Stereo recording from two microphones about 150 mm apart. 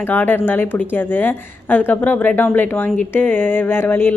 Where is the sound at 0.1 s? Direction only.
10° left (ahead or behind).